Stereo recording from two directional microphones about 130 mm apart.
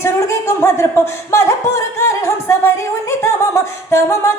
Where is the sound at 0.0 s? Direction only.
20° left (ahead or behind).